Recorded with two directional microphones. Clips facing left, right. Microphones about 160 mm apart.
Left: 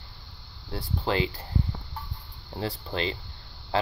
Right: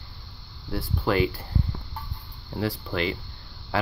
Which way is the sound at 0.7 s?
25° left (ahead or behind).